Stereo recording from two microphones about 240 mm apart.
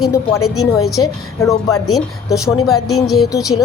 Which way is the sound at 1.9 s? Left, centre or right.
Centre.